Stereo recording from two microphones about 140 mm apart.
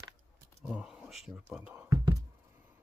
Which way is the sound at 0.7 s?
5° right (ahead or behind).